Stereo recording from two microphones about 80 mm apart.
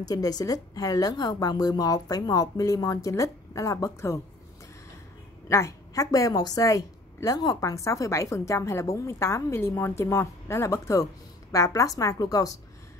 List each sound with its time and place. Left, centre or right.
0.0 s a woman's voice: left
5.5 s a woman's voice: left